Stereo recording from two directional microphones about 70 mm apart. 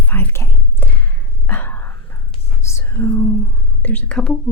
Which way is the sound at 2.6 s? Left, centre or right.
Left.